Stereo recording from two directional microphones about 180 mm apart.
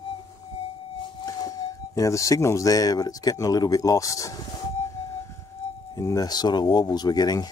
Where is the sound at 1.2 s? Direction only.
20° left (ahead or behind).